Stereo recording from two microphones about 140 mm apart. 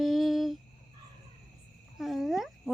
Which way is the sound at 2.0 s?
Centre (ahead or behind).